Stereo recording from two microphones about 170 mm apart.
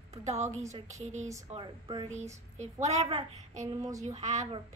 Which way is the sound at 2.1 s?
45° right (ahead or behind).